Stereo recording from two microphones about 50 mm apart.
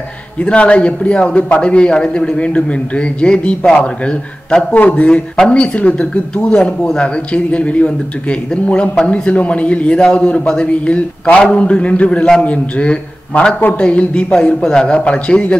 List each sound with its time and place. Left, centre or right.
0.4 s a man's voice: left
4.7 s a man's voice: left
5.0 s a man's voice: left